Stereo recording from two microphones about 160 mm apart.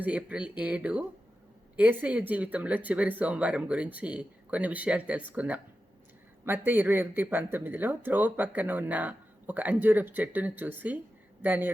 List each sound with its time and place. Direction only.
0.0 s speech: 10° right (ahead or behind)
6.7 s speech: 15° right (ahead or behind)